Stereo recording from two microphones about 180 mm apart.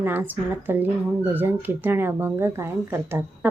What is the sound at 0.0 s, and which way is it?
Speech, 10° right (ahead or behind).